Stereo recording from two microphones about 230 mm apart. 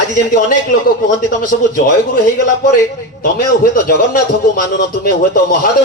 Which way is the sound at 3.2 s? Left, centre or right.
Left.